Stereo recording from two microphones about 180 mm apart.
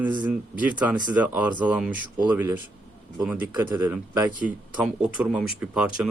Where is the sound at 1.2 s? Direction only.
10° right (ahead or behind).